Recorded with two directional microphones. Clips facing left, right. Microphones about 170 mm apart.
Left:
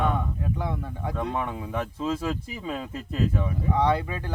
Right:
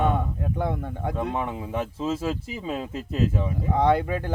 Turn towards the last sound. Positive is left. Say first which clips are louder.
# right 3 dB
turn(degrees=-50)  # may be behind; listen again after turning